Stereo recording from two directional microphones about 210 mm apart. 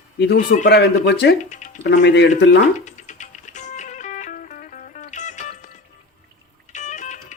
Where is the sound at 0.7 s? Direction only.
50° left (ahead or behind).